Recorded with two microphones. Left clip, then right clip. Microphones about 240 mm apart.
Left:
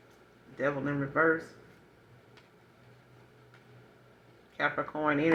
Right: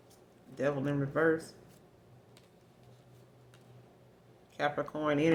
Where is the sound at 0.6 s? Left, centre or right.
Right.